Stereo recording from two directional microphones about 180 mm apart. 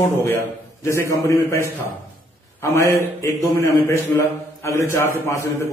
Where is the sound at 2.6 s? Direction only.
15° left (ahead or behind).